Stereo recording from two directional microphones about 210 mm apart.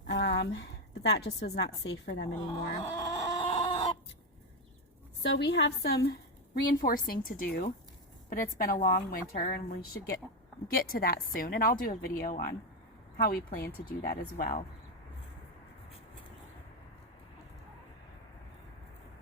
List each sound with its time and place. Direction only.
0.1 s a woman's voice: 55° left (ahead or behind)
2.8 s chicken: 20° left (ahead or behind)
5.2 s a woman's voice: 55° left (ahead or behind); by 14.6 s 40° left (ahead or behind)